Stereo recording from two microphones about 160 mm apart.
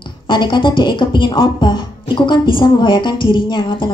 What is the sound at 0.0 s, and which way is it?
Speech, 30° left (ahead or behind).